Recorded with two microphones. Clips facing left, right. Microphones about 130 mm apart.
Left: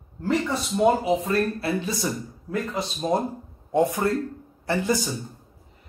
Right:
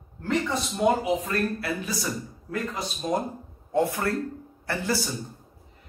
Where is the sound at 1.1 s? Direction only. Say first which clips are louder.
Left 3 dB; 25° left (ahead or behind).